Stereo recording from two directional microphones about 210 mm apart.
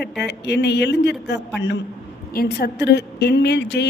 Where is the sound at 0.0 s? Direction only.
55° left (ahead or behind).